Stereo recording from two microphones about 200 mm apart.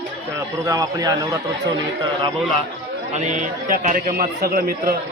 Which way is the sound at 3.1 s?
35° right (ahead or behind).